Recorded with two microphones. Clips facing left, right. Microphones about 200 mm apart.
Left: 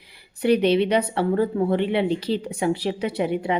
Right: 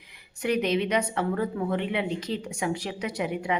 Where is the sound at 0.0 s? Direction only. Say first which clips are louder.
Left 7 dB; 30° left (ahead or behind).